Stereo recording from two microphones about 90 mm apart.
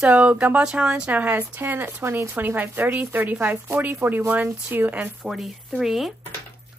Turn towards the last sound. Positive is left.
turn(degrees=-5)  # may be behind; listen again after turning